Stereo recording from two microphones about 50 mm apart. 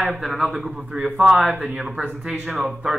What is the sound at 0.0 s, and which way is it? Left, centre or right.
Speech, centre.